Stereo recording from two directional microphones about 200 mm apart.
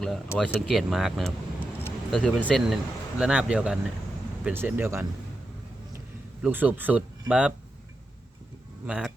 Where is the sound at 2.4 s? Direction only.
Centre (ahead or behind).